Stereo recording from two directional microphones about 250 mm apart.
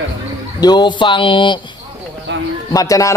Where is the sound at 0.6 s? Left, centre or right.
Centre.